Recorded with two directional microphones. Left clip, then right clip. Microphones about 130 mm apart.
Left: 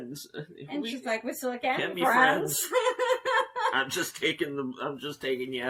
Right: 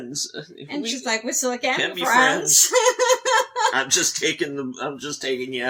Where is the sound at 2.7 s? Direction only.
20° right (ahead or behind).